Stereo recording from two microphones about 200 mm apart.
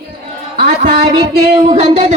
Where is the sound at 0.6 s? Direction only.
30° right (ahead or behind).